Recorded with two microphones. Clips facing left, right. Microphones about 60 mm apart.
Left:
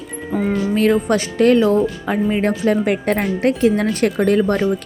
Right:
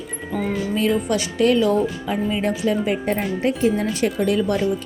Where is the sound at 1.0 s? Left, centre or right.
Left.